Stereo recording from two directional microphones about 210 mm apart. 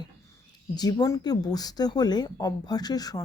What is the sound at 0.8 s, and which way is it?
Speech, 20° left (ahead or behind).